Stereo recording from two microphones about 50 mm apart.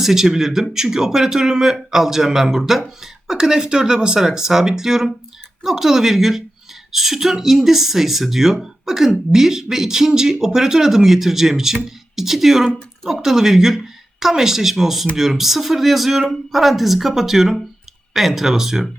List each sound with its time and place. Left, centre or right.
0.0 s speech: centre